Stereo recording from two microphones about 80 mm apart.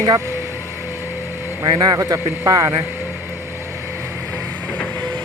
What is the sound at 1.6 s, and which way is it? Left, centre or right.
Speech, right.